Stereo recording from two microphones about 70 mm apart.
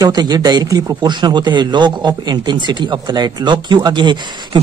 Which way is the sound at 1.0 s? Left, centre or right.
Right.